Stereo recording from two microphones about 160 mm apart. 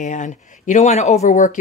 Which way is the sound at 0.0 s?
50° left (ahead or behind).